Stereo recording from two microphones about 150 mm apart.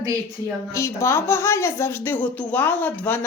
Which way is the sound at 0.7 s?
20° left (ahead or behind).